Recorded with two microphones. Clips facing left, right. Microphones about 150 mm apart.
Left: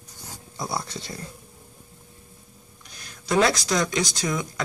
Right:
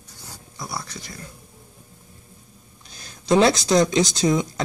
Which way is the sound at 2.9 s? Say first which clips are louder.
Right 7 dB; 30° right (ahead or behind).